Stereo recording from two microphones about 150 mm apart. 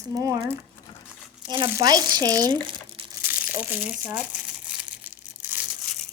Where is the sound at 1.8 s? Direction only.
25° right (ahead or behind).